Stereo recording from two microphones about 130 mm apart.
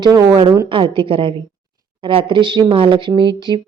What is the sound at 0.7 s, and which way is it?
Speech, 40° right (ahead or behind).